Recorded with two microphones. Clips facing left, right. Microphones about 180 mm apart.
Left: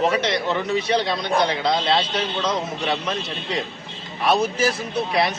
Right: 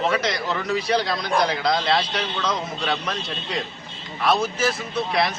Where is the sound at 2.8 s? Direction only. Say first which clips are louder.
Left 1 dB; 10° left (ahead or behind).